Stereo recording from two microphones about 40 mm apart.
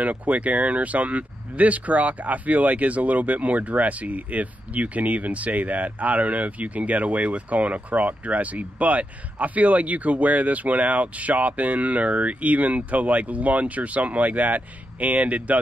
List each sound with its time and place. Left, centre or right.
0.0 s speech: right